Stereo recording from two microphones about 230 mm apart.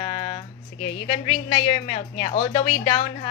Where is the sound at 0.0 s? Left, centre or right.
Left.